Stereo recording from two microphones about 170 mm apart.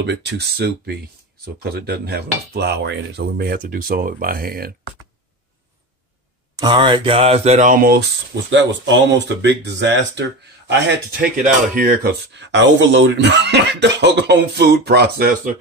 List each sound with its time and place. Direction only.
0.0 s speech: 90° right; by 4.7 s 60° right (ahead or behind)
6.6 s speech: 30° right (ahead or behind); by 10.2 s 90° right
11.7 s speech: 60° right (ahead or behind)